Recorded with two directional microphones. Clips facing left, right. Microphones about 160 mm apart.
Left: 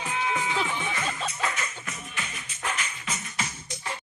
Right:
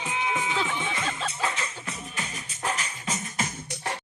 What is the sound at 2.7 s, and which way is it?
Music, 40° right (ahead or behind).